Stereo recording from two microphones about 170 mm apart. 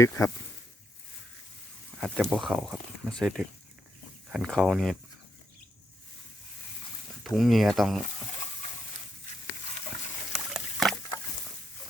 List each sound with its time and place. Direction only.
0.2 s speech: 15° left (ahead or behind)
2.0 s speech: 5° right (ahead or behind)
7.3 s speech: centre (ahead or behind)
10.3 s patter: centre (ahead or behind)